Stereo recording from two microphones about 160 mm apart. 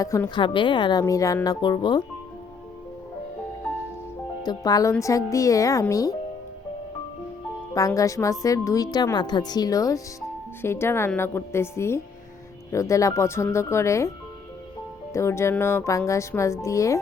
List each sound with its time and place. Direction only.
0.0 s a woman's voice: 20° left (ahead or behind)
4.4 s a woman's voice: 25° left (ahead or behind)
7.7 s a woman's voice: 20° left (ahead or behind)
15.1 s speech: 15° left (ahead or behind)